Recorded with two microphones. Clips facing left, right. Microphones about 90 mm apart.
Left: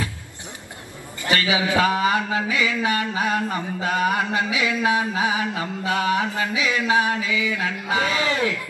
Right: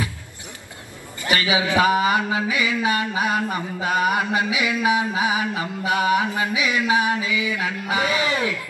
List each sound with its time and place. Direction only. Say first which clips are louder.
1.2 s a man's voice: even; 20° right (ahead or behind)
2.5 s mantra: even; 20° right (ahead or behind)